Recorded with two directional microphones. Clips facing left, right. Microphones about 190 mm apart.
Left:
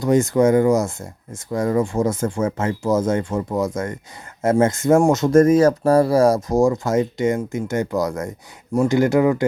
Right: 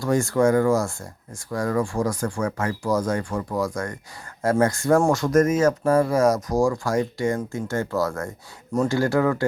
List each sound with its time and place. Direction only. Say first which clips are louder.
0.0 s speech: left 4 dB; 20° left (ahead or behind)